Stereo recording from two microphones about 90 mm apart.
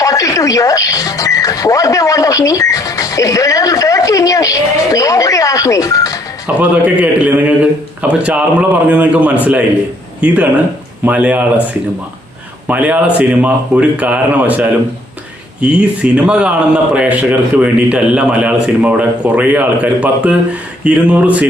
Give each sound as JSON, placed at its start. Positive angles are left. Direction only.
{"t": 0.0, "sound": "speech", "side_deg": 40}
{"t": 6.5, "sound": "a man's voice", "side_deg": -15}